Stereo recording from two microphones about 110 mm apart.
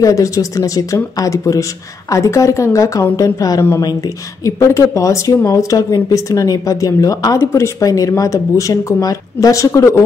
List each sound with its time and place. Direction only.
0.0 s speech: 30° left (ahead or behind)
7.3 s speech: 25° left (ahead or behind)